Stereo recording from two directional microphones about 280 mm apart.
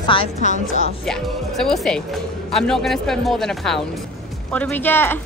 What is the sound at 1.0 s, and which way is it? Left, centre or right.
Speech, centre.